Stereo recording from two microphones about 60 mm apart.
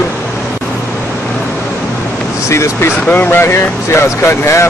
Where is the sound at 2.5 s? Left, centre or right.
Left.